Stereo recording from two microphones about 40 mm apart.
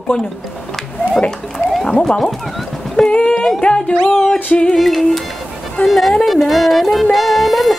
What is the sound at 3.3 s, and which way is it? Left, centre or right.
Music, centre.